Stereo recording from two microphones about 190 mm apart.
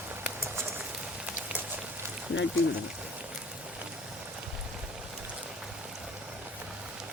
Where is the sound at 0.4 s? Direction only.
10° right (ahead or behind).